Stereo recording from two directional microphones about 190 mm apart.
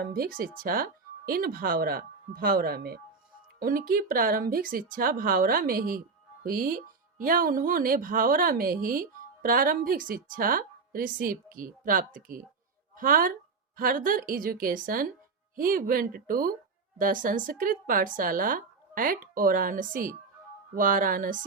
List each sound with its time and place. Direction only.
0.0 s speech: 50° right (ahead or behind)